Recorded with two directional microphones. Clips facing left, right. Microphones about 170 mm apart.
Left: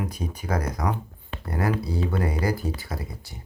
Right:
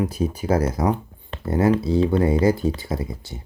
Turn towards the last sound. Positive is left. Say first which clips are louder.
# right 7 dB
turn(degrees=-20)  # may be behind; listen again after turning